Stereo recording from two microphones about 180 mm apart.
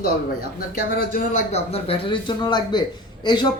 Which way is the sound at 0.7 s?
50° left (ahead or behind).